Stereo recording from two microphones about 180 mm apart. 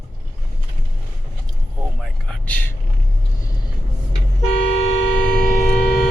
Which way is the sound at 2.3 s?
10° left (ahead or behind).